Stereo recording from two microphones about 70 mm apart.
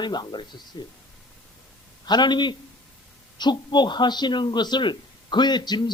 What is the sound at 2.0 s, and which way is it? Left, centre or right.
Speech, left.